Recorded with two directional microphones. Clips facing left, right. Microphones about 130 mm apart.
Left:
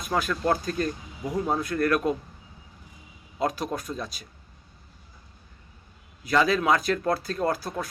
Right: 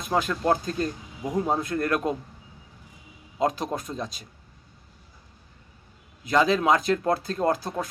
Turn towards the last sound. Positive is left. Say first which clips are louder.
# right 2 dB
turn(degrees=-20)  # may be behind; listen again after turning